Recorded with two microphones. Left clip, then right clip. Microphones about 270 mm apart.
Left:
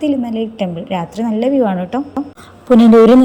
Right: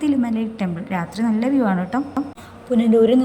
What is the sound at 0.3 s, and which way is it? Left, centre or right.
Speech, right.